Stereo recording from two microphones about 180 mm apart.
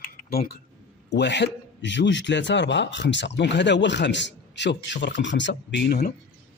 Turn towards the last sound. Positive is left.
turn(degrees=70)  # may be behind; listen again after turning